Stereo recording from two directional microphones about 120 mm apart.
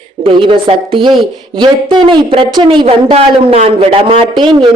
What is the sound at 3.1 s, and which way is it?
Speech, 60° right (ahead or behind).